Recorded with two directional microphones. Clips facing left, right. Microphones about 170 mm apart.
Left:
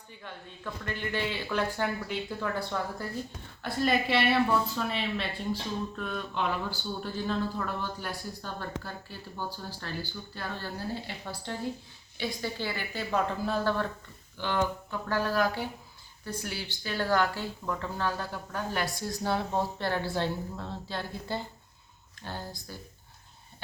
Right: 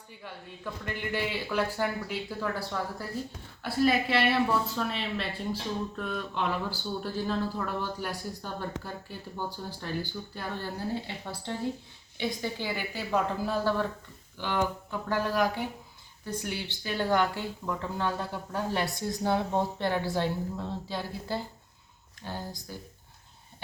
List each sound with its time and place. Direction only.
0.2 s speech: 10° right (ahead or behind)
3.6 s a sound: 5° right (ahead or behind)
7.8 s a woman's voice: 10° right (ahead or behind)